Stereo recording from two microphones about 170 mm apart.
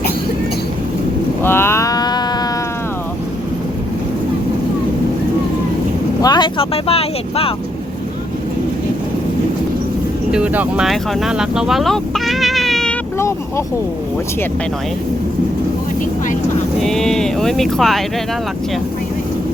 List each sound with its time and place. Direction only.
1.4 s a sound: 15° left (ahead or behind)
6.2 s speech: 25° left (ahead or behind)
10.3 s speech: 10° right (ahead or behind)
16.8 s speech: 5° left (ahead or behind)